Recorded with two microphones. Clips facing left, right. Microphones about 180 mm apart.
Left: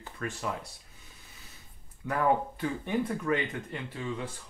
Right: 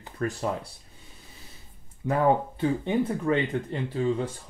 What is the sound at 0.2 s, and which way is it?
Speech, 35° right (ahead or behind).